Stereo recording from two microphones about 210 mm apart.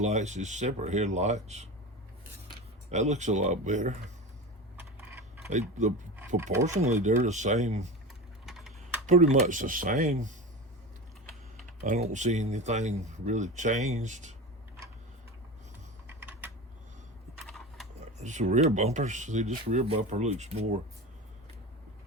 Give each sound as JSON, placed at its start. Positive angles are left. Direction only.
{"t": 0.0, "sound": "speech", "side_deg": -30}
{"t": 2.9, "sound": "speech", "side_deg": -30}
{"t": 5.5, "sound": "speech", "side_deg": -35}
{"t": 6.1, "sound": "speech", "side_deg": -15}
{"t": 6.8, "sound": "speech", "side_deg": -35}
{"t": 8.4, "sound": "typing", "side_deg": 0}
{"t": 9.0, "sound": "speech", "side_deg": -35}
{"t": 11.9, "sound": "speech", "side_deg": -35}
{"t": 16.0, "sound": "typing", "side_deg": -10}
{"t": 17.4, "sound": "a sound", "side_deg": 0}
{"t": 18.2, "sound": "speech", "side_deg": -35}